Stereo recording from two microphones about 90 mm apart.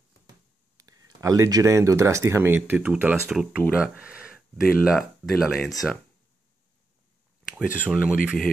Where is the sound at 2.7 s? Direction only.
15° right (ahead or behind).